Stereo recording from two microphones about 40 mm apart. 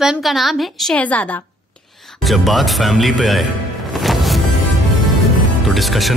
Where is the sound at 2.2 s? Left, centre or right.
Centre.